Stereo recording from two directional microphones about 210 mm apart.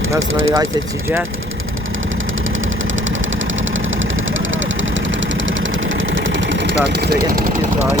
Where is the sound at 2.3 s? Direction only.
65° right (ahead or behind); by 7.2 s 50° right (ahead or behind).